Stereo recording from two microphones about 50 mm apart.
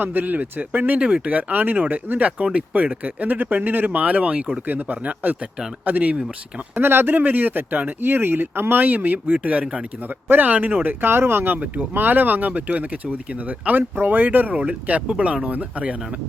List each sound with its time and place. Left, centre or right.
0.0 s speech: right
0.9 s speech: right
6.8 s speech: right
8.8 s speech: right
14.5 s speech: right